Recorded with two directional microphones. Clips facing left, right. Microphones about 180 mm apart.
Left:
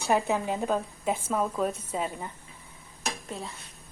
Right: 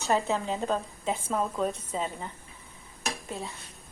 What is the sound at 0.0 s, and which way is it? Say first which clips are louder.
Speech: left 1 dB; 15° left (ahead or behind).